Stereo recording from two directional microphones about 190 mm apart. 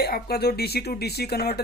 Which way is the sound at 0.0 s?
55° left (ahead or behind).